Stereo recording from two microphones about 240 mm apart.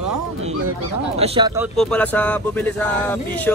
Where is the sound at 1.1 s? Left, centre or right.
Right.